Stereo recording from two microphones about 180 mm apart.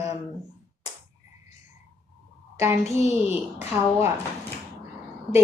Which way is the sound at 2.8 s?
35° left (ahead or behind).